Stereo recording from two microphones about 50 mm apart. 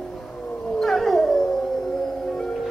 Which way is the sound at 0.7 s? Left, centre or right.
Centre.